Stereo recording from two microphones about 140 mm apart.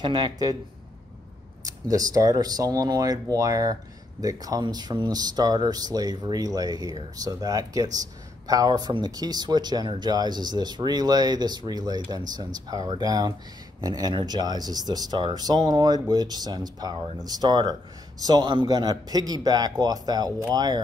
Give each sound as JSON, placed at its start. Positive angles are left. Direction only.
{"t": 0.0, "sound": "speech", "side_deg": -30}
{"t": 1.6, "sound": "speech", "side_deg": -25}